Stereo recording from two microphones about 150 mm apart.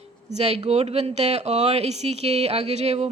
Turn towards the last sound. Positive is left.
turn(degrees=-45)  # may be behind; listen again after turning